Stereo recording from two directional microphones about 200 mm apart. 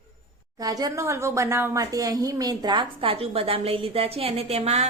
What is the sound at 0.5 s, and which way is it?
A woman's voice, 20° right (ahead or behind).